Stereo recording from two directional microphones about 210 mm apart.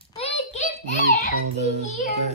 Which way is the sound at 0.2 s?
30° left (ahead or behind).